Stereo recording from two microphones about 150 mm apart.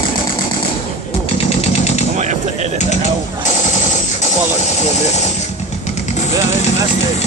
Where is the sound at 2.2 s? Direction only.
50° right (ahead or behind).